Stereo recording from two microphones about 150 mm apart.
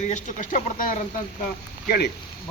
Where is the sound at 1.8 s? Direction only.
90° left.